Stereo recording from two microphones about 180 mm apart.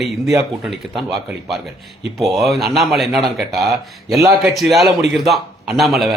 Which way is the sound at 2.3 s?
Centre (ahead or behind).